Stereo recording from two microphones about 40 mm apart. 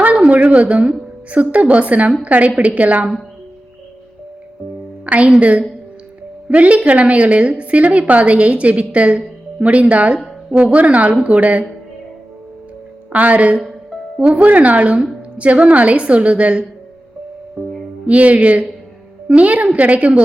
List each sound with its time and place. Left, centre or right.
0.3 s a woman's voice: right
5.0 s a woman's voice: right
13.1 s a woman's voice: right
18.0 s a woman's voice: right